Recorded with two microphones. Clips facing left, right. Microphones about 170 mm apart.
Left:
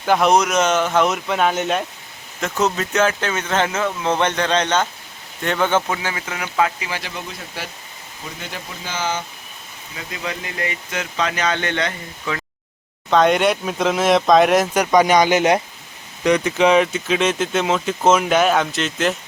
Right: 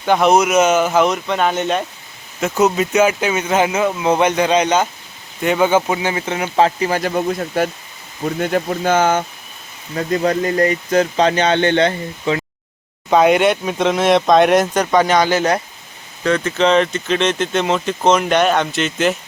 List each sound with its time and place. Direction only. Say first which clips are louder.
0.0 s speech: right 2 dB; centre (ahead or behind)
2.4 s speech: right 5 dB; 10° right (ahead or behind); by 12.4 s 30° right (ahead or behind)
13.1 s speech: right 3 dB; 5° right (ahead or behind)